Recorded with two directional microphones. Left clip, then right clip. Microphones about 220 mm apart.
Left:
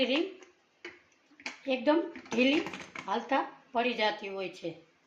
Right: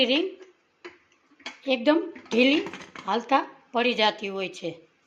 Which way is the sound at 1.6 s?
40° right (ahead or behind).